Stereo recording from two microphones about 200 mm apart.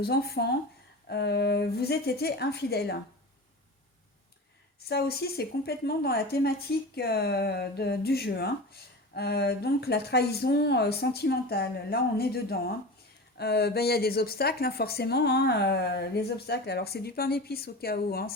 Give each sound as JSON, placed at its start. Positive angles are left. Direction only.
{"t": 0.0, "sound": "a woman's voice", "side_deg": 50}
{"t": 4.9, "sound": "a woman's voice", "side_deg": 50}